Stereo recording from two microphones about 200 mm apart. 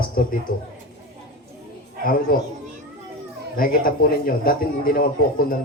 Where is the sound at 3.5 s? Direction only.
45° left (ahead or behind).